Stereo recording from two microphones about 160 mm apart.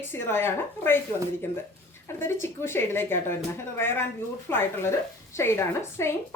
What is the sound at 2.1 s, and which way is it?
A woman's voice, 15° left (ahead or behind).